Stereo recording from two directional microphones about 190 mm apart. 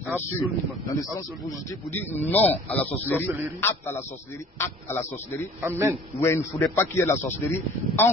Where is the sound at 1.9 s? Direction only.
10° left (ahead or behind).